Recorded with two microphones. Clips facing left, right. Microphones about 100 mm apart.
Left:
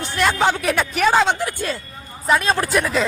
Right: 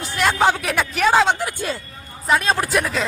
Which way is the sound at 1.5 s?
15° right (ahead or behind).